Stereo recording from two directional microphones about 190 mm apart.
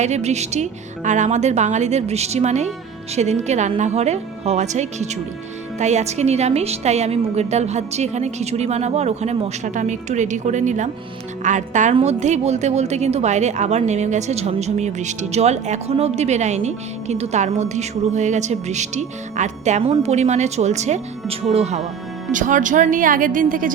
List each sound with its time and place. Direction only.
0.0 s a woman's voice: 35° right (ahead or behind)